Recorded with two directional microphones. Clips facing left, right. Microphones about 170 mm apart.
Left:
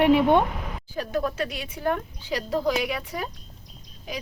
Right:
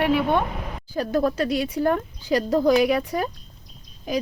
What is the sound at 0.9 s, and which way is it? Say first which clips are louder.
Speech: right 5 dB; 40° right (ahead or behind).